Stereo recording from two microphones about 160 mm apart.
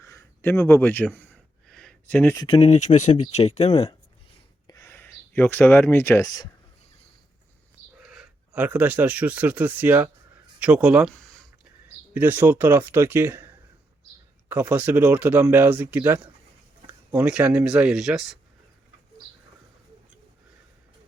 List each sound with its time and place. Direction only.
0.0 s a sound: 15° left (ahead or behind)
2.3 s speech: 25° left (ahead or behind)
2.6 s speech: 45° left (ahead or behind)
4.6 s a sound: 20° left (ahead or behind)
8.0 s speech: 5° right (ahead or behind)
12.1 s speech: 10° right (ahead or behind)
14.5 s speech: 10° right (ahead or behind)